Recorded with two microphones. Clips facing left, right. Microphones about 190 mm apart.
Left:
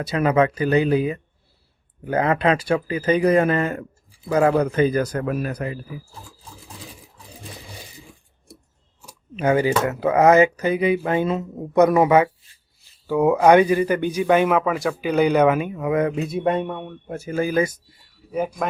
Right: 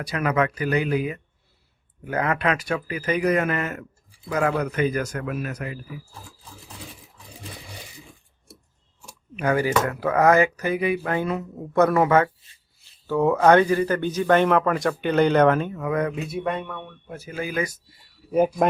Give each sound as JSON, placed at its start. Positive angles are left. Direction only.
{"t": 0.0, "sound": "a man's voice", "side_deg": 25}
{"t": 9.3, "sound": "a man's voice", "side_deg": 25}
{"t": 16.3, "sound": "a man's voice", "side_deg": 45}
{"t": 17.1, "sound": "speech", "side_deg": 45}
{"t": 18.3, "sound": "speech", "side_deg": -30}